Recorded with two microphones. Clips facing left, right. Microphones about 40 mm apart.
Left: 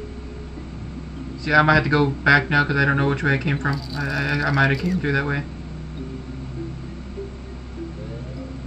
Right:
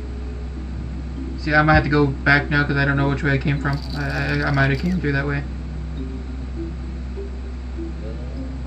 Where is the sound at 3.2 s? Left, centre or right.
Right.